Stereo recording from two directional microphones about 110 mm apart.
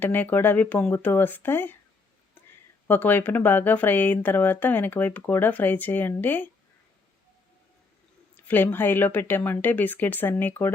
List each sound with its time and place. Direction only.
0.0 s speech: 15° left (ahead or behind)
2.8 s speech: 15° left (ahead or behind)
8.4 s speech: 20° left (ahead or behind)